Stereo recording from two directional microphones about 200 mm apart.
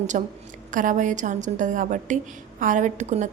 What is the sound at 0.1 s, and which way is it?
A woman's voice, 40° right (ahead or behind).